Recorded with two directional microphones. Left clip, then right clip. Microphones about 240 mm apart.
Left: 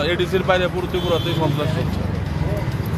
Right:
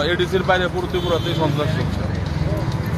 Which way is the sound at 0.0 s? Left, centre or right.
Centre.